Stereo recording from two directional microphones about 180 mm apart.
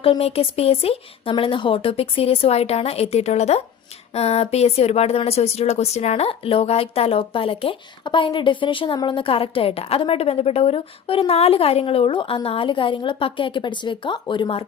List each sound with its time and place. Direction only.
0.0 s speech: 30° left (ahead or behind)